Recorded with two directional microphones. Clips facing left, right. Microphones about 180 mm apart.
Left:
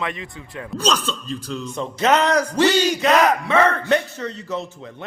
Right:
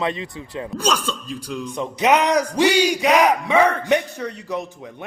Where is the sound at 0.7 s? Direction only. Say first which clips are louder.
Left 1 dB; 10° right (ahead or behind).